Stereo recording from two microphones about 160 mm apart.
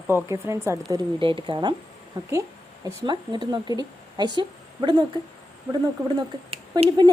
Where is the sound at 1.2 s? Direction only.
30° right (ahead or behind).